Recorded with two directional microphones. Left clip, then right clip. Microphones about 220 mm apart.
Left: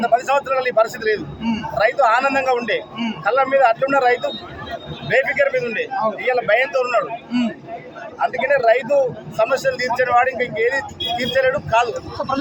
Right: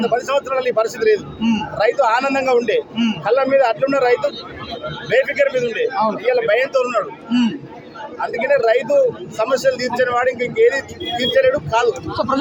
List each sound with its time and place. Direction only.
0.0 s a man's voice: 5° right (ahead or behind)
1.4 s a man's voice: 35° right (ahead or behind)
1.8 s a man's voice: 5° right (ahead or behind)
2.9 s a man's voice: 35° right (ahead or behind)
3.2 s a man's voice: 5° right (ahead or behind)
7.3 s speech: 30° right (ahead or behind)
8.2 s a man's voice: 5° right (ahead or behind)